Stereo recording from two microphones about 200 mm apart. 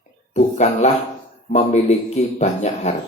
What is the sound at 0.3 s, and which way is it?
Speech, 35° left (ahead or behind).